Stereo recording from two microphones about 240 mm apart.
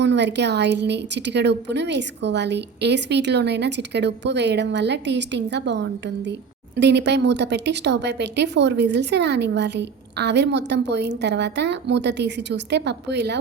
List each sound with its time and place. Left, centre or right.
0.0 s speech: right